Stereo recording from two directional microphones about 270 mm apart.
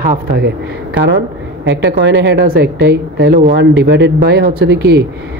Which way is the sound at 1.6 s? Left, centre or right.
Right.